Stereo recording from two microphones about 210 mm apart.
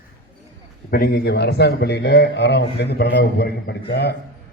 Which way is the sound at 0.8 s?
45° left (ahead or behind).